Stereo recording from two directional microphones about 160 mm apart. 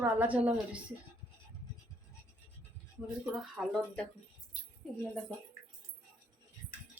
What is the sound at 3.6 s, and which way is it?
Speech, centre (ahead or behind).